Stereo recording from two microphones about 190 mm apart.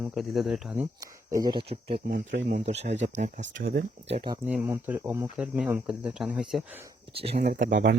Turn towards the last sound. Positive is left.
turn(degrees=-70)  # may be behind; listen again after turning